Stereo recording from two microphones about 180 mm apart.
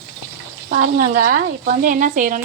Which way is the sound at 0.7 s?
50° right (ahead or behind).